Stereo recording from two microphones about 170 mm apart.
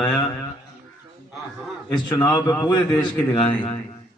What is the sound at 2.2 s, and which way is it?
Speech, 25° left (ahead or behind).